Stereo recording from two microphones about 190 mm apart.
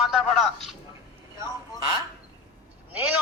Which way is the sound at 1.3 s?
15° right (ahead or behind).